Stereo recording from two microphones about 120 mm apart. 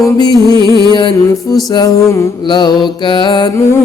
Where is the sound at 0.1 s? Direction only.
30° left (ahead or behind).